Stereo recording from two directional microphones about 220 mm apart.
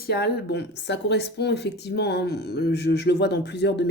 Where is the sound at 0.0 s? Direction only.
45° left (ahead or behind).